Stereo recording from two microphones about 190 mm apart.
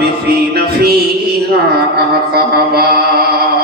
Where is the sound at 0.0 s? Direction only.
55° right (ahead or behind).